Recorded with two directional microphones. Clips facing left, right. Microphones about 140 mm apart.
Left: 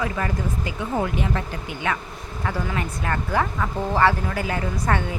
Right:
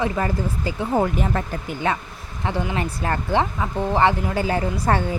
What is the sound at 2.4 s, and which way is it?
A woman's voice, 25° right (ahead or behind).